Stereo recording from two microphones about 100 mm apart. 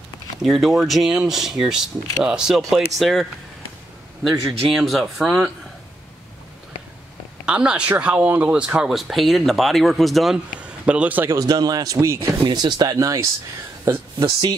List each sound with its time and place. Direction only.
0.4 s speech: centre (ahead or behind)
7.4 s speech: 10° right (ahead or behind)
10.6 s a man's voice: 10° right (ahead or behind)
11.3 s speech: 40° right (ahead or behind)
12.4 s speech: 45° right (ahead or behind)
12.9 s speech: 35° right (ahead or behind)